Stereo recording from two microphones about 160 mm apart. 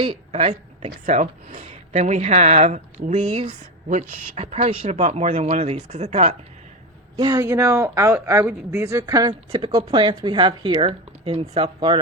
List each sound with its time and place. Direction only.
0.3 s speech: 45° right (ahead or behind)
4.4 s speech: 40° right (ahead or behind)
7.2 s speech: 25° right (ahead or behind)